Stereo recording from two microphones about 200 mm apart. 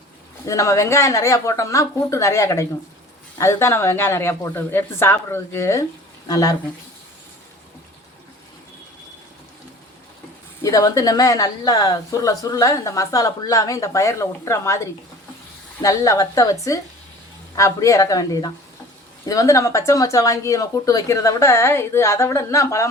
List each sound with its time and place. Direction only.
0.4 s a woman's voice: 15° left (ahead or behind)
10.6 s a woman's voice: 15° left (ahead or behind)
15.8 s a woman's voice: 15° left (ahead or behind)